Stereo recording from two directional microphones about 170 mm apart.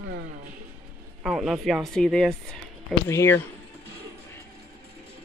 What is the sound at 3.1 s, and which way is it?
Speech, 15° left (ahead or behind).